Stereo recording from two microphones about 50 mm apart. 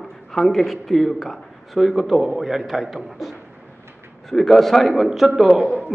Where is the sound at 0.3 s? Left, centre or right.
Centre.